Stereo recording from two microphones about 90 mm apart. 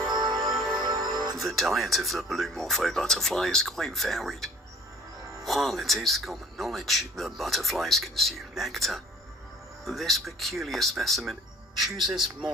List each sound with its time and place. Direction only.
0.1 s music: 55° right (ahead or behind)
0.5 s music: centre (ahead or behind)
0.8 s music: 55° right (ahead or behind)
1.4 s speech: centre (ahead or behind)
5.5 s speech: centre (ahead or behind)